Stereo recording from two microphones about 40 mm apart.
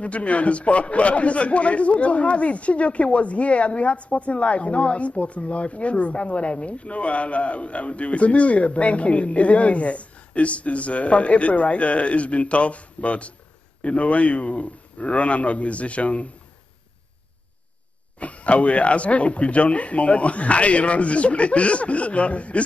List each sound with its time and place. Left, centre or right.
0.0 s a man's voice: left
18.2 s a man's voice: left